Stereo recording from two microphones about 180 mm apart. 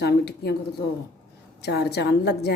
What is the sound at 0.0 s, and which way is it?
Speech, 65° left (ahead or behind).